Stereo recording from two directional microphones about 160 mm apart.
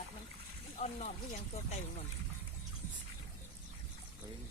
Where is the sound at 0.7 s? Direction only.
45° left (ahead or behind).